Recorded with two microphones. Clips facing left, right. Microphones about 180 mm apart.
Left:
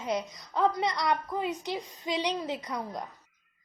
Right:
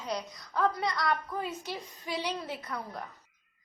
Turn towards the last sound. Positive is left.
turn(degrees=15)  # may be behind; listen again after turning